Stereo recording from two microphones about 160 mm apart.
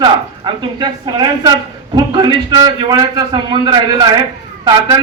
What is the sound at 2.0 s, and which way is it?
A man's voice, 25° right (ahead or behind).